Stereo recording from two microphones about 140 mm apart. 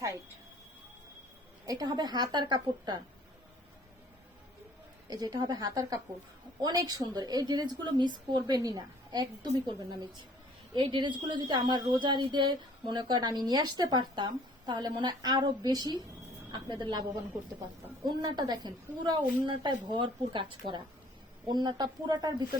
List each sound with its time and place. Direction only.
1.6 s a woman's voice: 25° right (ahead or behind)
5.0 s a woman's voice: 25° right (ahead or behind)
10.8 s a woman's voice: 35° right (ahead or behind)